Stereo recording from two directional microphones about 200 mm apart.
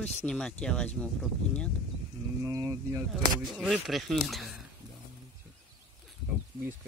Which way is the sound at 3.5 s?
Centre (ahead or behind).